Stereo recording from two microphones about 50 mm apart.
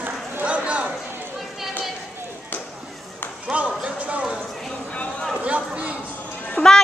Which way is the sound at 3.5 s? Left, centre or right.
Right.